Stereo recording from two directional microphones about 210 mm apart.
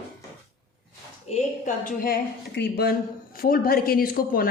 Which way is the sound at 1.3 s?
40° left (ahead or behind).